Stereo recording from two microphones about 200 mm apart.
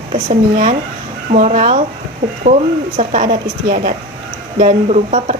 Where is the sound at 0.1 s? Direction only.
35° right (ahead or behind).